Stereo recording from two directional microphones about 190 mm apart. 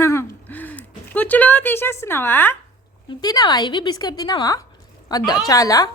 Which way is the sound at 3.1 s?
20° left (ahead or behind).